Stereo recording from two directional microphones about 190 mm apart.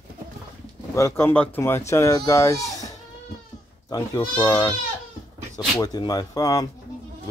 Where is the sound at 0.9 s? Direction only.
10° left (ahead or behind).